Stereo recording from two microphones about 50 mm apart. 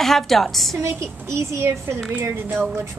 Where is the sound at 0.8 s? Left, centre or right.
Right.